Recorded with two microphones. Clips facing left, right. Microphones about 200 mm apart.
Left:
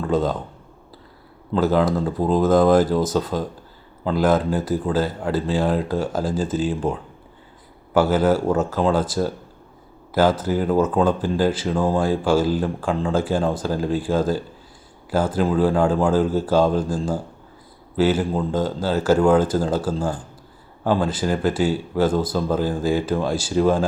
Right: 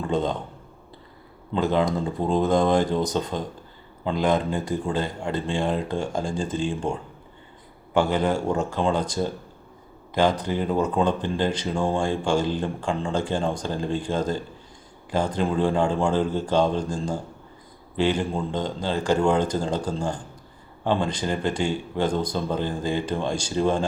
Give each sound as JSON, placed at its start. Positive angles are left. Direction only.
{"t": 0.1, "sound": "speech", "side_deg": 5}
{"t": 1.5, "sound": "speech", "side_deg": 5}